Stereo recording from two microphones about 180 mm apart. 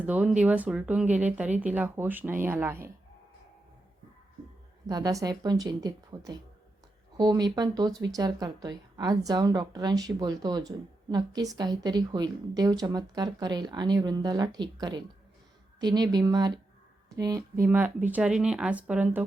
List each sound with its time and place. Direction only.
0.0 s speech: 10° right (ahead or behind)
4.9 s speech: 20° right (ahead or behind)